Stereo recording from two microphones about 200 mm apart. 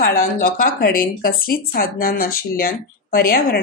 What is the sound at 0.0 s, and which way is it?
Speech, 45° left (ahead or behind).